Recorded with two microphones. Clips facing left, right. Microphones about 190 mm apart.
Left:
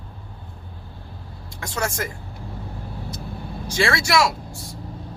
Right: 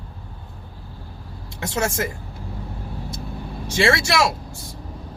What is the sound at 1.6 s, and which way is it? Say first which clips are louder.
Speech: right 3 dB; 25° right (ahead or behind).